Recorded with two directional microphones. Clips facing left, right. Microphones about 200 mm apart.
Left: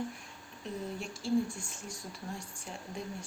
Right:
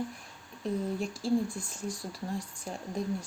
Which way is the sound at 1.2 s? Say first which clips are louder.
Right 2 dB; 35° right (ahead or behind).